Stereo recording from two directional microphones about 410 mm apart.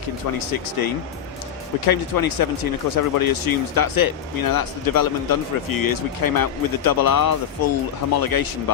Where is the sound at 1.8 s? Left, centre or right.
Left.